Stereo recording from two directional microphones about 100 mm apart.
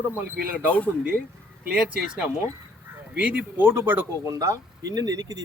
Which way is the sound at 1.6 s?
10° right (ahead or behind).